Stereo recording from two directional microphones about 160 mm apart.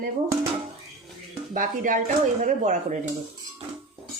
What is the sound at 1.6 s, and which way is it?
Speech, 55° right (ahead or behind).